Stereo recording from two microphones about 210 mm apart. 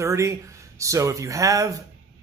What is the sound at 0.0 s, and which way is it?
Speech, 15° right (ahead or behind).